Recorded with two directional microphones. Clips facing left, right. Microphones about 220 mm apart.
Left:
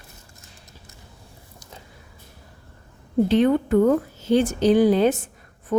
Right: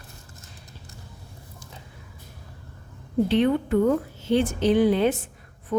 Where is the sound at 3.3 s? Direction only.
45° left (ahead or behind).